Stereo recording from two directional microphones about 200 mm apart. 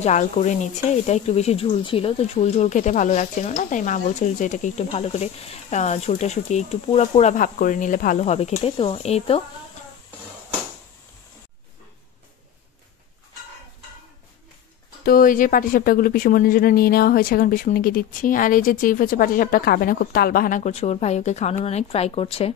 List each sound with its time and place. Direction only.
0.0 s speech: 35° left (ahead or behind)
15.0 s speech: 45° left (ahead or behind)